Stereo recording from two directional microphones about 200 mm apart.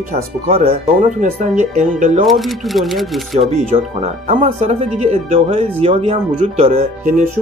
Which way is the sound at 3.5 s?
30° right (ahead or behind).